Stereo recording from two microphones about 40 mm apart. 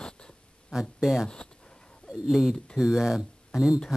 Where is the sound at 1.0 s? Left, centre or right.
Centre.